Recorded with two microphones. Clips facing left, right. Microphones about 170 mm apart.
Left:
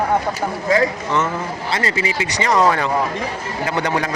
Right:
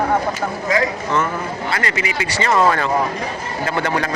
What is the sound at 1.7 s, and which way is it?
Speech, 30° left (ahead or behind).